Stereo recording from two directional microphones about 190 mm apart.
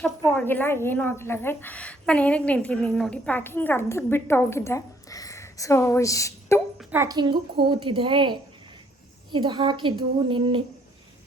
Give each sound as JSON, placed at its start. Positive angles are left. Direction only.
{"t": 0.0, "sound": "a woman's voice", "side_deg": 10}
{"t": 6.7, "sound": "a woman's voice", "side_deg": -10}